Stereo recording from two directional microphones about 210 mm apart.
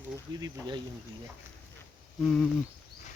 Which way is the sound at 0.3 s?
20° right (ahead or behind).